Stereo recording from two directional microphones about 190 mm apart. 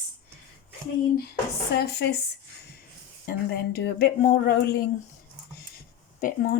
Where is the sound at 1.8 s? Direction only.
60° left (ahead or behind).